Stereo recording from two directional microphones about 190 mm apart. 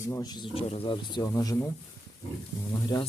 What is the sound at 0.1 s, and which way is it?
A man's voice, 20° left (ahead or behind).